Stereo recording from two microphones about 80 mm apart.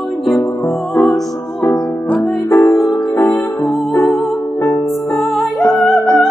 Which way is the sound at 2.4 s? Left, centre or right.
Left.